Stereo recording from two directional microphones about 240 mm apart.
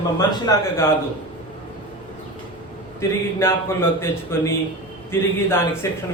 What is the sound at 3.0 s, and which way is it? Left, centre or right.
Speech, centre.